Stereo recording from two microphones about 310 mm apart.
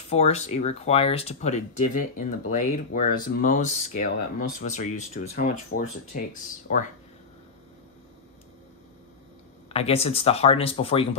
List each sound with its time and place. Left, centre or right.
0.1 s speech: left
9.7 s speech: centre